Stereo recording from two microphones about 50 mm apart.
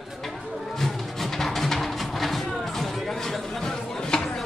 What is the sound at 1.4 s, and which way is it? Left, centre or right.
Music, centre.